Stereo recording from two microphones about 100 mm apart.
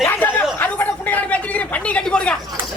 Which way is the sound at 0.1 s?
20° left (ahead or behind).